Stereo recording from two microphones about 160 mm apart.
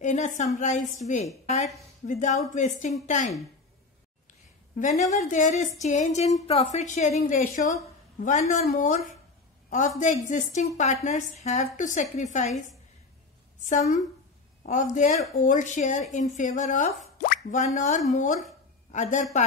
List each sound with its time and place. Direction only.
0.0 s a woman's voice: 50° left (ahead or behind)
4.7 s a woman's voice: 50° left (ahead or behind)
13.7 s a woman's voice: 50° left (ahead or behind)
17.2 s a woman's voice: 60° left (ahead or behind)